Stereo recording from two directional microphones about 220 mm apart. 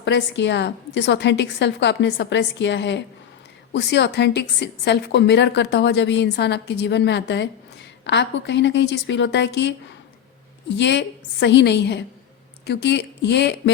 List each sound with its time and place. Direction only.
0.0 s a woman's voice: 55° left (ahead or behind)
10.8 s a woman's voice: 50° left (ahead or behind)